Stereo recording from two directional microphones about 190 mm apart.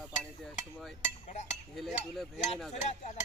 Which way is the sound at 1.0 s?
40° left (ahead or behind).